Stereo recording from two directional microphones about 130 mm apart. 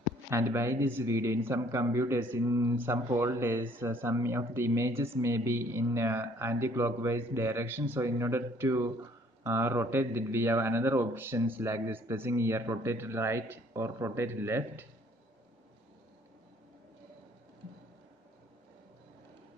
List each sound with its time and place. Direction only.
0.3 s a man's voice: 20° right (ahead or behind)